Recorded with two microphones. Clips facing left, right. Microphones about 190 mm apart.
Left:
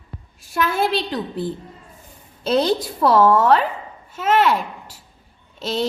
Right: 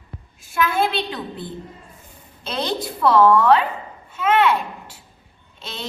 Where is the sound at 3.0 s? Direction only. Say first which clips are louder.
Even; 40° left (ahead or behind).